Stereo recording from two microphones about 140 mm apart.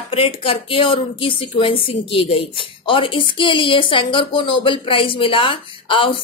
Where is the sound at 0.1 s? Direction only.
40° left (ahead or behind).